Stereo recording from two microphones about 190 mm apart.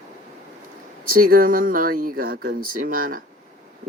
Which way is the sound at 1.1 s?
50° right (ahead or behind).